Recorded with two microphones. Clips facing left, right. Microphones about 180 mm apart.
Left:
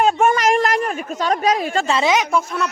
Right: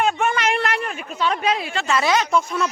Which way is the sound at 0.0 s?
40° left (ahead or behind).